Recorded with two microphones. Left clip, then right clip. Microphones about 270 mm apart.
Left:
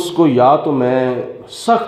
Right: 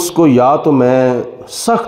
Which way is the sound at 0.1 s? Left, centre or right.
Right.